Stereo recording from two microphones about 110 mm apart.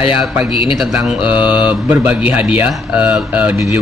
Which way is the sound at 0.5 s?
50° left (ahead or behind).